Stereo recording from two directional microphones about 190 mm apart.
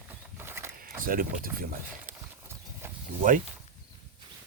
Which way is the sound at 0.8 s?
45° right (ahead or behind).